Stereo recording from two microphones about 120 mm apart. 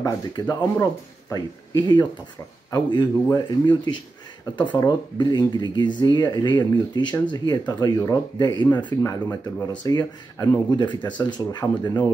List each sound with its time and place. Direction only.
0.0 s speech: 30° left (ahead or behind)